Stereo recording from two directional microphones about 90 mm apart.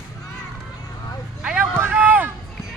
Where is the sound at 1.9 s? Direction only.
20° right (ahead or behind).